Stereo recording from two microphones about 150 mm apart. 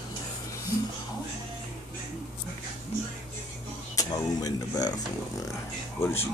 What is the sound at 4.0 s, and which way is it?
Speech, 25° left (ahead or behind).